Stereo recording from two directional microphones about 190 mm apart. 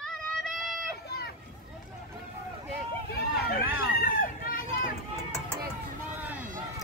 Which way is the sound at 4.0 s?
50° left (ahead or behind).